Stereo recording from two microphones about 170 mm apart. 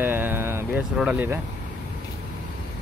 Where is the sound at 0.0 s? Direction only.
10° right (ahead or behind).